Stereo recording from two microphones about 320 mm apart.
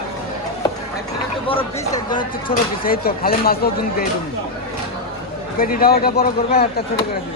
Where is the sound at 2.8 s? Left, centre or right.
Left.